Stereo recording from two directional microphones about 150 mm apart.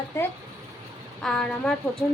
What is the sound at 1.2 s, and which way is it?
Speech, 5° left (ahead or behind).